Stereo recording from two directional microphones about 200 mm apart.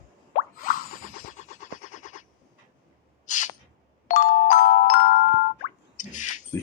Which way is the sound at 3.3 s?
40° left (ahead or behind).